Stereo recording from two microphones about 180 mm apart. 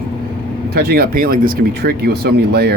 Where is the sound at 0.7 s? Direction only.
60° right (ahead or behind).